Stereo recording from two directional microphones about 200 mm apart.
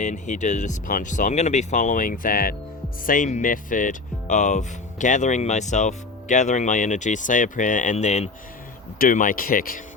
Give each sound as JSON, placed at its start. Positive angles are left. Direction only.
{"t": 0.0, "sound": "speech", "side_deg": 35}